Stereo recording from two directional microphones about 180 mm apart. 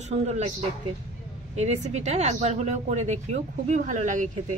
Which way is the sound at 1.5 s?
35° right (ahead or behind).